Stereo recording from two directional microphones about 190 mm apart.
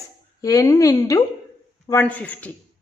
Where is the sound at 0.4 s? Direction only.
15° left (ahead or behind).